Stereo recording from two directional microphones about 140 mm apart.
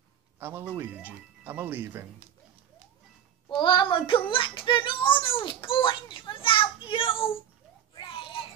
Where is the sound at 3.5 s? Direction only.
35° left (ahead or behind).